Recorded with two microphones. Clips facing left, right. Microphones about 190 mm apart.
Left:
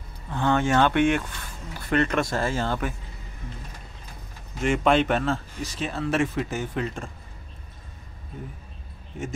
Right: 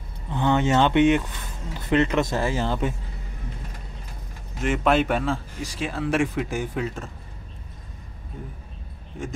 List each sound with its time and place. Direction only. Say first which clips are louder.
0.3 s speech: right 1 dB; 20° right (ahead or behind)
4.6 s speech: even; 5° right (ahead or behind)